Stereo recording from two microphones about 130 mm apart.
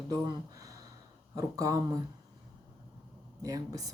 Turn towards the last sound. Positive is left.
turn(degrees=-25)  # may be behind; listen again after turning